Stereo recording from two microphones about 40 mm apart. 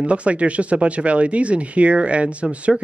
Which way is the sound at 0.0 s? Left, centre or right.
Right.